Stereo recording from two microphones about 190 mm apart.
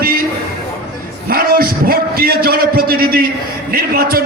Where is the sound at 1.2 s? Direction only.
50° right (ahead or behind).